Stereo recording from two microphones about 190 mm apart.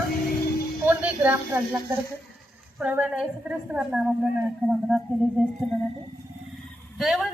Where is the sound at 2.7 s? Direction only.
5° right (ahead or behind).